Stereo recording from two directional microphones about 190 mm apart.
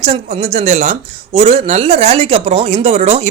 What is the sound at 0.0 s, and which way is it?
Speech, 30° right (ahead or behind).